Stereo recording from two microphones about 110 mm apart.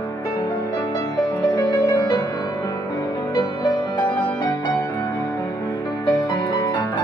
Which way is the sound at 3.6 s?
45° left (ahead or behind).